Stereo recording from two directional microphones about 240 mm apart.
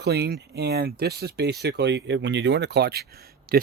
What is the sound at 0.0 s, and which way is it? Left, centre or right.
Speech, right.